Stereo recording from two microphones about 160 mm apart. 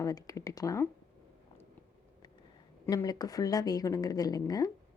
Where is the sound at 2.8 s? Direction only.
20° left (ahead or behind).